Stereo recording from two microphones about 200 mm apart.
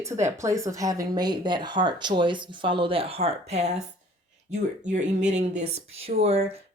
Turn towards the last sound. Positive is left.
turn(degrees=-30)  # may be behind; listen again after turning